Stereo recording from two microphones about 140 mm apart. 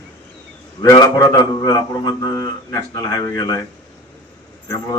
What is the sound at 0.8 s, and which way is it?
A man's voice, 25° left (ahead or behind).